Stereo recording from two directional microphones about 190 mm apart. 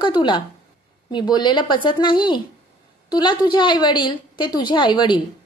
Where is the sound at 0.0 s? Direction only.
25° left (ahead or behind).